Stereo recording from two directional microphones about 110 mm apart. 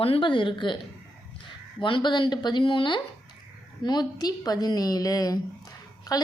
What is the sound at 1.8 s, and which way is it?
A woman's voice, 45° left (ahead or behind).